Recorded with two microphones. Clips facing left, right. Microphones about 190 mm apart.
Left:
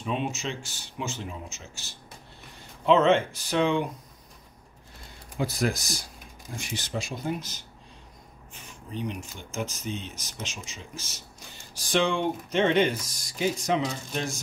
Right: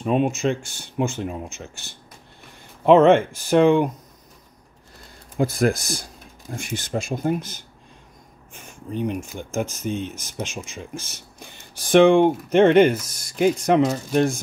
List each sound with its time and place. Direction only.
0.0 s speech: 50° right (ahead or behind)
5.4 s speech: 50° right (ahead or behind)